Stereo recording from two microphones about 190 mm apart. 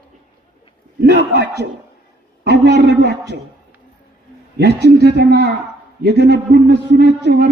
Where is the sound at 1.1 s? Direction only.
60° right (ahead or behind).